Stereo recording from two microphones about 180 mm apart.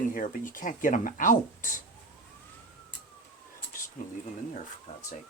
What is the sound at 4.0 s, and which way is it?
Speech, 45° left (ahead or behind).